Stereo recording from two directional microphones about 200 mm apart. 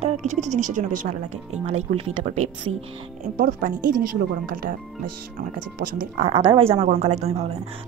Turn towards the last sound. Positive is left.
turn(degrees=-30)  # may be behind; listen again after turning